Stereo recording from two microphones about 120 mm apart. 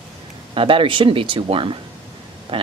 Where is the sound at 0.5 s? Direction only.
45° right (ahead or behind).